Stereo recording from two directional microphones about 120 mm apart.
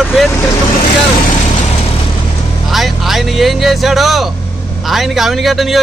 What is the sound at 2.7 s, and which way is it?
A man's voice, centre (ahead or behind).